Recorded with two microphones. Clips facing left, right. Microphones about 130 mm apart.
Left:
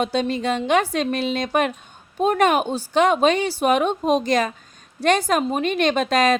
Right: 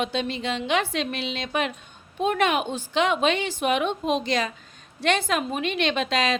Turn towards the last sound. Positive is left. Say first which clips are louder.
# left 6 dB
turn(degrees=45)  # may be behind; listen again after turning